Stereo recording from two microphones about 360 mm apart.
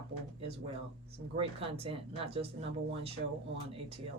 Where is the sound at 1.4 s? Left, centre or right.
Centre.